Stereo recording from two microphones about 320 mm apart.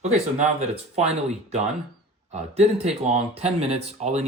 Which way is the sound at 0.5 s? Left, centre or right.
Centre.